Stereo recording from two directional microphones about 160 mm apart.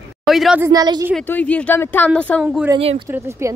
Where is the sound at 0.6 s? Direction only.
25° right (ahead or behind).